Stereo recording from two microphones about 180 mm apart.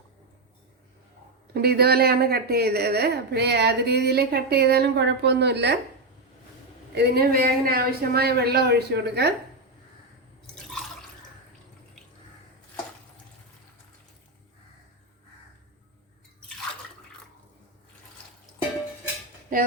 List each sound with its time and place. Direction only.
1.5 s a woman's voice: 60° right (ahead or behind)
6.9 s a woman's voice: 65° right (ahead or behind)